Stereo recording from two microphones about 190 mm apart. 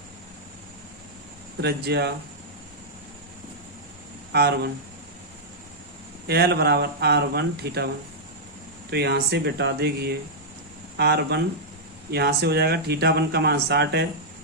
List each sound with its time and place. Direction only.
1.6 s speech: 60° right (ahead or behind)
4.3 s speech: 60° right (ahead or behind)
6.2 s speech: 60° right (ahead or behind)
8.9 s speech: 60° right (ahead or behind)